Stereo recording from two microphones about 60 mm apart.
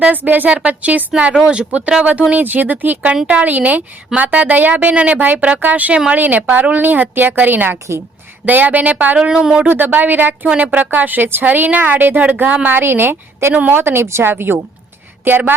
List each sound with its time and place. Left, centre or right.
0.1 s a woman's voice: right
1.3 s speech: centre
2.3 s a woman's voice: right
9.1 s speech: centre
9.6 s a woman's voice: right
12.6 s a woman's voice: right
13.5 s a woman's voice: right
13.7 s a woman's voice: right